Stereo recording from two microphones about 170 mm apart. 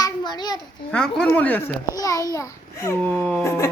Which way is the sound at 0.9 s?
5° left (ahead or behind).